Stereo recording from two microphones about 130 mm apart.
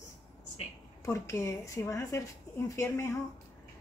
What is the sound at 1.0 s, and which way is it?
A woman's voice, 20° left (ahead or behind).